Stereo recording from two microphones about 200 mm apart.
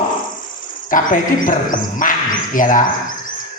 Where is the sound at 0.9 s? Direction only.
40° left (ahead or behind).